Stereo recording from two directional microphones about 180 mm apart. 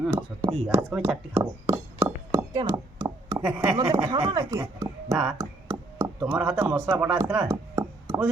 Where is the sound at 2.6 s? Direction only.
20° right (ahead or behind).